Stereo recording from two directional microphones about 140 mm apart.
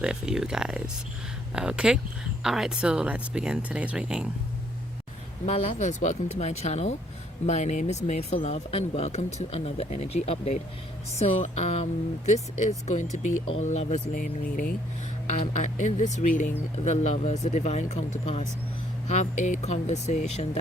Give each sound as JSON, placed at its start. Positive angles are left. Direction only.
{"t": 0.0, "sound": "speech", "side_deg": -5}
{"t": 5.5, "sound": "speech", "side_deg": 55}
{"t": 12.9, "sound": "speech", "side_deg": 60}
{"t": 15.4, "sound": "speech", "side_deg": 60}